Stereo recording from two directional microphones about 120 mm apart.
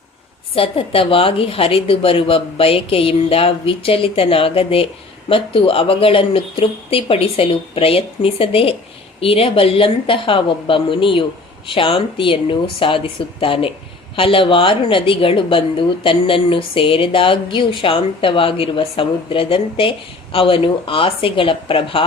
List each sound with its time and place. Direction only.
0.5 s a woman's voice: 50° left (ahead or behind)